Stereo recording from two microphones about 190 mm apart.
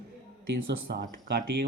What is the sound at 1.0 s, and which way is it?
Speech, 55° right (ahead or behind).